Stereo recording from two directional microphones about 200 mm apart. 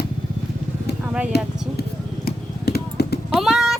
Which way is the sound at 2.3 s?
50° left (ahead or behind).